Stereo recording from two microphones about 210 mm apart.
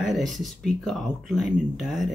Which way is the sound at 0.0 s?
Centre (ahead or behind).